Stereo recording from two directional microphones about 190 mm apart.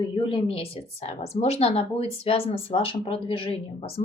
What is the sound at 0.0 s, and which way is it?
A woman's voice, 30° left (ahead or behind).